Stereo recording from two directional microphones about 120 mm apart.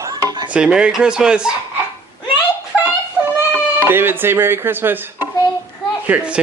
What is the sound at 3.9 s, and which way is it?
Speech, 20° right (ahead or behind).